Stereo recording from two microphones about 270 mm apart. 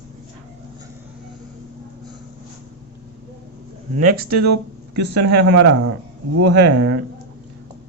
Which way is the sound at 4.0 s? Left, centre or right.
Right.